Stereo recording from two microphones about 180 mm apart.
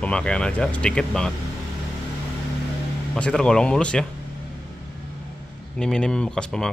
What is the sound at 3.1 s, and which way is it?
Speech, 5° left (ahead or behind).